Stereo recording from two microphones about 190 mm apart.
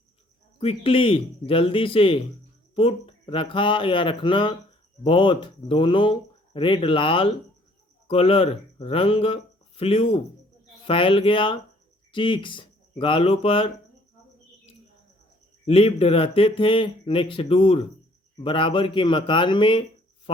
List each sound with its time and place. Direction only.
0.6 s speech: 30° left (ahead or behind)
15.6 s speech: 30° left (ahead or behind)